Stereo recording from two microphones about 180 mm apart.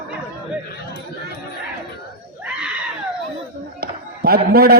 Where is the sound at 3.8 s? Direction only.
60° right (ahead or behind).